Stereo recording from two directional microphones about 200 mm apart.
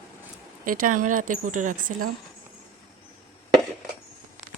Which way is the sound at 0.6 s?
45° right (ahead or behind).